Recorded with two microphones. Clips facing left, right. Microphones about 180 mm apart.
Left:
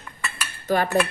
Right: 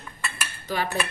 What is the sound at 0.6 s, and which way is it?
Cutlery, 50° left (ahead or behind).